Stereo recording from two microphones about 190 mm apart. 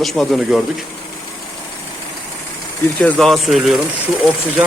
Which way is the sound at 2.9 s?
5° left (ahead or behind).